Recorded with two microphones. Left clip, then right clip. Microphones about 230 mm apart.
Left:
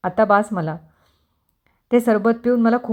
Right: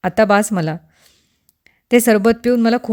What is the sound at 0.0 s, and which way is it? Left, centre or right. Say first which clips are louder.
Speech: right 2 dB; right.